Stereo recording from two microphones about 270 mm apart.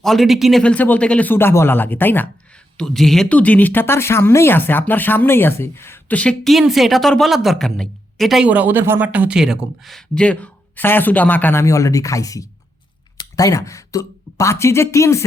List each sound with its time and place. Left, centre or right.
0.0 s speech: centre